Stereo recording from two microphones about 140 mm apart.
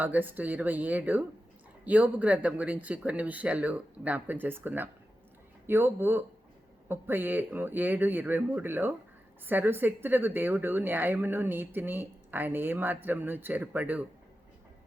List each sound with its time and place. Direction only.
0.0 s a woman's voice: 15° right (ahead or behind)